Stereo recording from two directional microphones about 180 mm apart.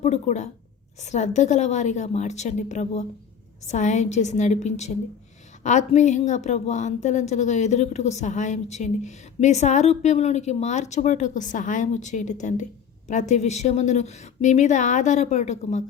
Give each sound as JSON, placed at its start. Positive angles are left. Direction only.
{"t": 0.0, "sound": "a woman's voice", "side_deg": 40}